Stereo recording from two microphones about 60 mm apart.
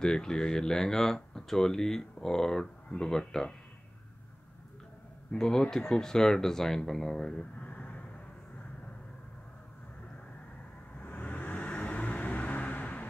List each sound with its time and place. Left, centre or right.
0.0 s speech: centre
5.3 s speech: centre
7.3 s a sound: left
11.0 s vehicle: left